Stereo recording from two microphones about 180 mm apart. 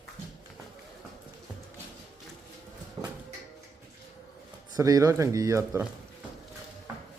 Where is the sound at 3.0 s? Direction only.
25° right (ahead or behind).